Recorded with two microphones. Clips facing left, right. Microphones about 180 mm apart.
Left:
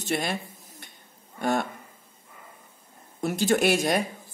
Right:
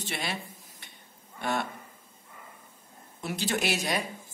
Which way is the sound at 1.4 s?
45° left (ahead or behind).